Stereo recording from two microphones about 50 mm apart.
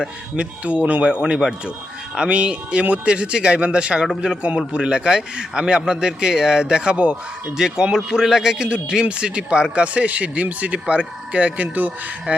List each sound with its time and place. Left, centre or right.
0.3 s a man's voice: right